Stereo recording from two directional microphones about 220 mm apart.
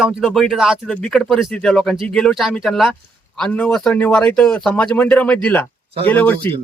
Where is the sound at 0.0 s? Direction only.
Centre (ahead or behind).